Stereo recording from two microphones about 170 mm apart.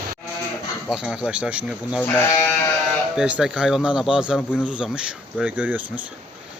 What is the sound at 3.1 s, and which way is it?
Speech, 5° right (ahead or behind).